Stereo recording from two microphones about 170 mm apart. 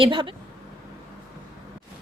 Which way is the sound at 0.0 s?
30° right (ahead or behind).